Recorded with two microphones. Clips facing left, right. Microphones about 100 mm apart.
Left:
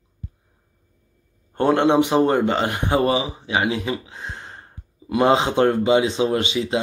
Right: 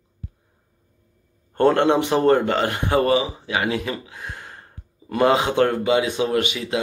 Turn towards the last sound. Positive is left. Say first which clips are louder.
# left 1 dB
turn(degrees=25)  # may be behind; listen again after turning